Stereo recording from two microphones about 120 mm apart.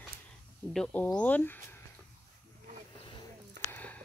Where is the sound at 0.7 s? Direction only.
10° left (ahead or behind).